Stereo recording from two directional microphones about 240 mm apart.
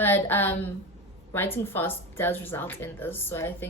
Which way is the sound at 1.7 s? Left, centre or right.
Centre.